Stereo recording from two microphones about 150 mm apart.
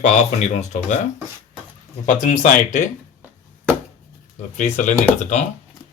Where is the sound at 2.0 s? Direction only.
55° left (ahead or behind).